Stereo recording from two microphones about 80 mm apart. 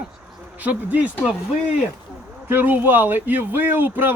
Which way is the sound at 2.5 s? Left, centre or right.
Right.